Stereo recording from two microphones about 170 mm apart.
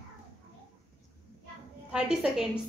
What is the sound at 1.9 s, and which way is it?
Speech, 5° right (ahead or behind).